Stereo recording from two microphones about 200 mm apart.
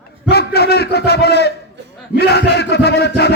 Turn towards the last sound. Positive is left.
turn(degrees=55)  # may be behind; listen again after turning